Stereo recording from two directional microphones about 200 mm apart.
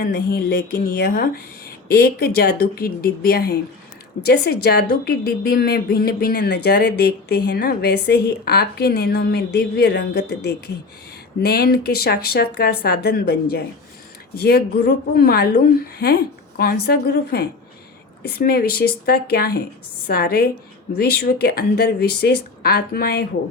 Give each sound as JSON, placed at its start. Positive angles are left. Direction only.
{"t": 0.0, "sound": "speech", "side_deg": 45}